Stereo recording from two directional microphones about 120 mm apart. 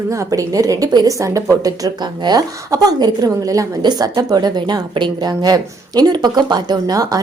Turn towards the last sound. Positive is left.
turn(degrees=-30)  # may be behind; listen again after turning